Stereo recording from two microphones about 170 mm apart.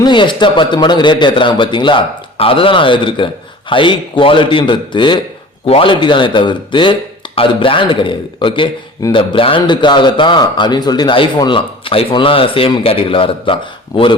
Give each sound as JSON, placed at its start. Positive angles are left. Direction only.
{"t": 0.0, "sound": "a man's voice", "side_deg": 30}